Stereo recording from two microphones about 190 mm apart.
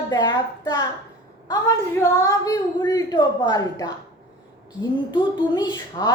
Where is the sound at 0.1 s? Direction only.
20° left (ahead or behind).